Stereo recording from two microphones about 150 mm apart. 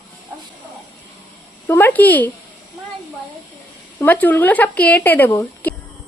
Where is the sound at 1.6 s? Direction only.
15° left (ahead or behind).